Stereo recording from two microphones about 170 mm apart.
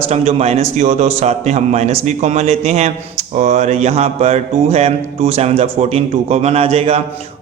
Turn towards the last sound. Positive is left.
turn(degrees=-35)  # may be behind; listen again after turning